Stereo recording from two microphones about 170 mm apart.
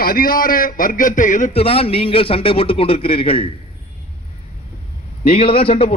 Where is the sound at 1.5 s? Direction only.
35° left (ahead or behind).